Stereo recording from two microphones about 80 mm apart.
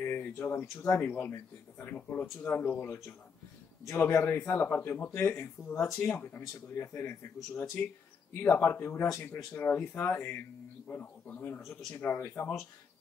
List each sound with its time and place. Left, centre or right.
0.0 s a man's voice: left
7.8 s a man's voice: left
9.1 s speech: left
9.5 s a man's voice: left
12.4 s speech: left